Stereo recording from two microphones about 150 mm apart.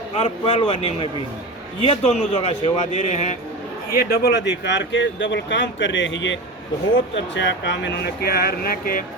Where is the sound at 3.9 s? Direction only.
90° left.